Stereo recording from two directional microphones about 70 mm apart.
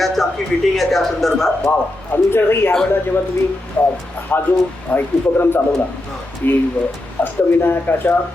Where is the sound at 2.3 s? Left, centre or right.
Left.